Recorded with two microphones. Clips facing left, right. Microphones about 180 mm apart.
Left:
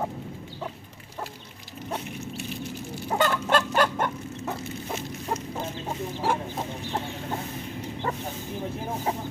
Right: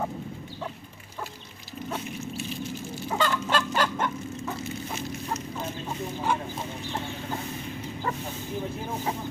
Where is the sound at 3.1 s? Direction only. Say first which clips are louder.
Left 3 dB; 50° left (ahead or behind).